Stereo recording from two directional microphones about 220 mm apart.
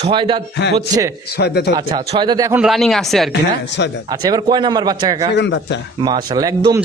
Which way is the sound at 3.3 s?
50° left (ahead or behind).